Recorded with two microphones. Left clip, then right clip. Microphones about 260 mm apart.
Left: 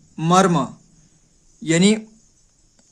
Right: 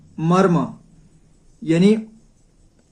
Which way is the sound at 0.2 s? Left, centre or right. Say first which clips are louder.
Left 1 dB; left.